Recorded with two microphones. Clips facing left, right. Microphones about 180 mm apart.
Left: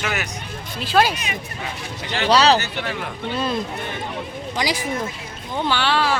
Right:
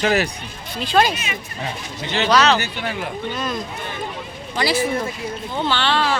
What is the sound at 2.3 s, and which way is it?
Speech, 30° left (ahead or behind).